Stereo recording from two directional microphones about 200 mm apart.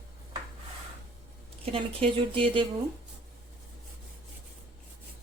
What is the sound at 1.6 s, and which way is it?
Speech, 30° right (ahead or behind).